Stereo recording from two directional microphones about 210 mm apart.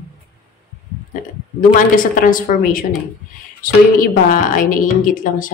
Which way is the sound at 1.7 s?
40° left (ahead or behind).